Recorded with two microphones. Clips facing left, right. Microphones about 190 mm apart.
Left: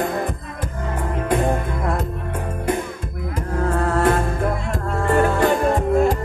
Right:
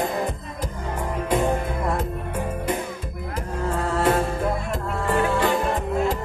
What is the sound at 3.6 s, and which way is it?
Music, 55° left (ahead or behind).